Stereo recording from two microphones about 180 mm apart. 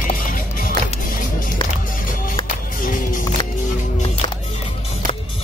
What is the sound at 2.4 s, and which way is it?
Music, 50° left (ahead or behind).